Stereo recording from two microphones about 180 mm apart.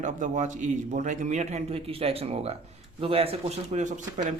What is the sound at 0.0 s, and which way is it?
A man's voice, 45° right (ahead or behind).